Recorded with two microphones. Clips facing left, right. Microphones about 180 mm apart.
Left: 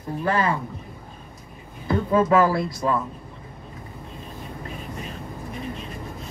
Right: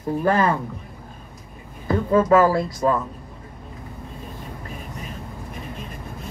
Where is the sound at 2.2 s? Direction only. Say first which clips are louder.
Right 3 dB; 40° right (ahead or behind).